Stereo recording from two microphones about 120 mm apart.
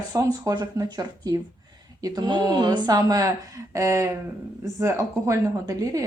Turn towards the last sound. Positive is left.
turn(degrees=-30)  # may be behind; listen again after turning